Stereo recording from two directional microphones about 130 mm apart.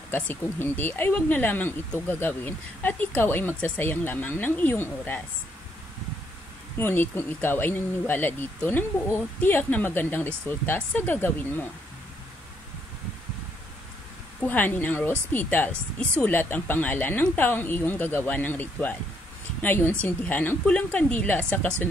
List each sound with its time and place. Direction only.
0.1 s speech: 15° left (ahead or behind)
6.8 s speech: 15° left (ahead or behind)
14.4 s speech: 15° left (ahead or behind)
20.0 s speech: 15° left (ahead or behind)